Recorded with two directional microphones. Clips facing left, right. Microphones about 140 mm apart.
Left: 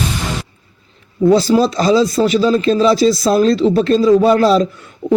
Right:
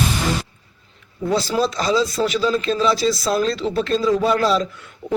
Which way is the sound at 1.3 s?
40° left (ahead or behind).